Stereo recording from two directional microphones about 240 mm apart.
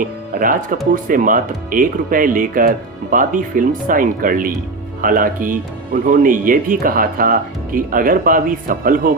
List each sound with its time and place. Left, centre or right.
0.0 s speech: right